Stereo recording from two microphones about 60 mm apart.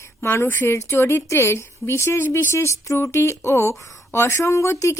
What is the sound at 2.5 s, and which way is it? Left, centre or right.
A woman's voice, left.